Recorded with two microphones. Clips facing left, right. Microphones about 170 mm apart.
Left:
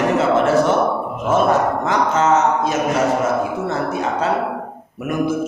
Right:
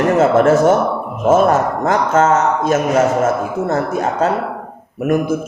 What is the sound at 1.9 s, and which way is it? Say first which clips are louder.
A man's voice: right 5 dB; 50° right (ahead or behind).